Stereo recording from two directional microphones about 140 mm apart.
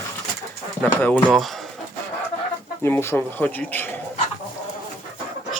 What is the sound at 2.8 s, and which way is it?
Speech, 15° left (ahead or behind).